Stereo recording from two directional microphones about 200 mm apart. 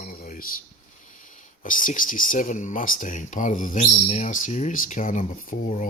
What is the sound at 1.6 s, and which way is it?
Speech, 40° left (ahead or behind).